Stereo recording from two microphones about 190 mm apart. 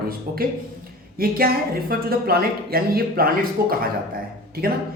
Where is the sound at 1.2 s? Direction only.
50° right (ahead or behind).